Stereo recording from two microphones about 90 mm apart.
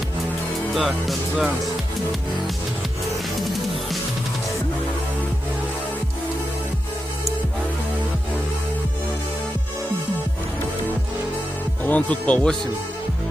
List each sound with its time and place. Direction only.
0.7 s speech: centre (ahead or behind)
3.1 s music: centre (ahead or behind)
11.8 s speech: 15° left (ahead or behind)